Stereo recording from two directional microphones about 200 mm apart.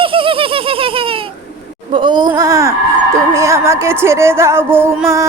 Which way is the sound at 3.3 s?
15° right (ahead or behind).